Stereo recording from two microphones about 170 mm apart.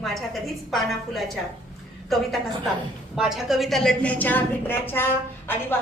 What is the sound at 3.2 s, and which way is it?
A woman's voice, centre (ahead or behind).